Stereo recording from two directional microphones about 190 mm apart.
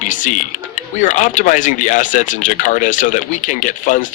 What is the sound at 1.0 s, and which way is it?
Speech, 40° left (ahead or behind).